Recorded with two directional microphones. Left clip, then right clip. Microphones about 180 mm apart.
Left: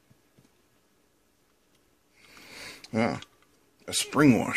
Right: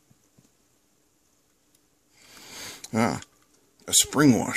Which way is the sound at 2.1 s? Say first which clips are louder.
Right 3 dB; 30° right (ahead or behind).